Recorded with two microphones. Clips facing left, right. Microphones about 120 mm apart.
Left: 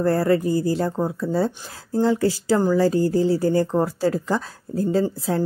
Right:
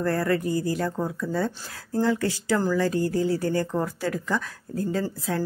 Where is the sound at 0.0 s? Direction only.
30° left (ahead or behind).